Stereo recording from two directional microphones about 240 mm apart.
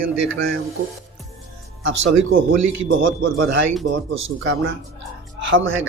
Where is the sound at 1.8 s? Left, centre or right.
Right.